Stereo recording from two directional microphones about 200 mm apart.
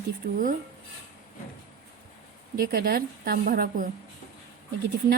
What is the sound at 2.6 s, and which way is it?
A woman's voice, 50° right (ahead or behind).